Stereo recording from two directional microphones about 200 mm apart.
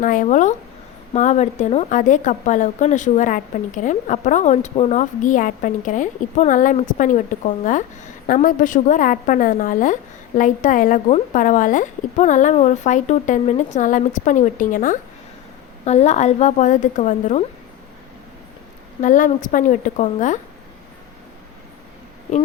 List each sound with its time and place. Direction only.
0.0 s a woman's voice: 40° left (ahead or behind)
19.0 s a woman's voice: 40° left (ahead or behind)